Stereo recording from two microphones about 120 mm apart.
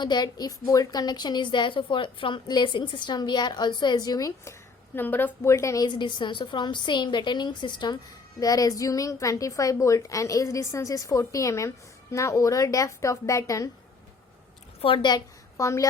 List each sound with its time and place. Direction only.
0.0 s a woman's voice: 35° left (ahead or behind)
4.9 s a woman's voice: 15° left (ahead or behind)
14.8 s a woman's voice: 45° left (ahead or behind)
15.5 s a woman's voice: 25° left (ahead or behind)